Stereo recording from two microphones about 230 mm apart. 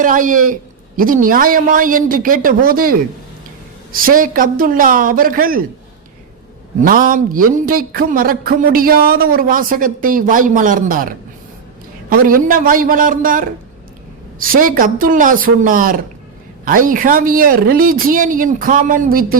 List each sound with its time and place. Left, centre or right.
0.0 s speech: right
6.8 s speech: right